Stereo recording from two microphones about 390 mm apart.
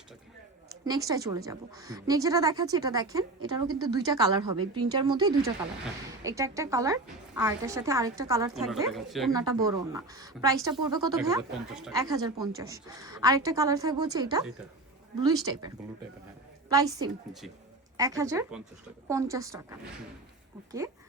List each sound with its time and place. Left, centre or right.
0.9 s speech: centre
4.6 s speech: right
4.9 s speech: centre